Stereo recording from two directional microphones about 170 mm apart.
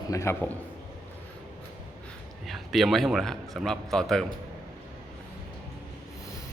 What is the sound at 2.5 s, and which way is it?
A man's voice, centre (ahead or behind).